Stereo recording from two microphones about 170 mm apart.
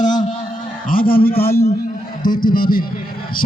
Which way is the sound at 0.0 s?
50° left (ahead or behind).